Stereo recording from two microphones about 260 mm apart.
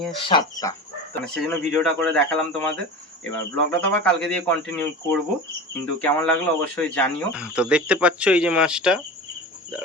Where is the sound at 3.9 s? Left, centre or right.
Centre.